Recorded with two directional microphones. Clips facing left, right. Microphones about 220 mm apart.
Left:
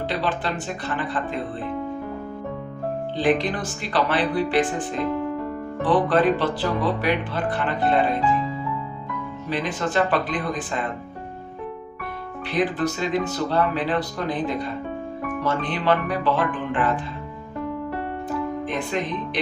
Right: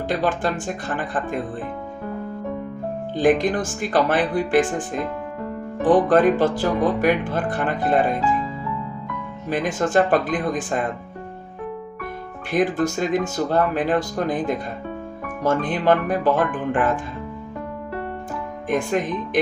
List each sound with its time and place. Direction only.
0.1 s speech: 45° right (ahead or behind)
3.2 s speech: 45° right (ahead or behind)
5.8 s speech: 45° right (ahead or behind)
9.5 s speech: 45° right (ahead or behind)
12.5 s speech: 45° right (ahead or behind)
18.7 s speech: 45° right (ahead or behind)